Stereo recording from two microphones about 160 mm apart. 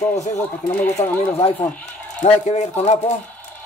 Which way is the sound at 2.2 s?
45° left (ahead or behind).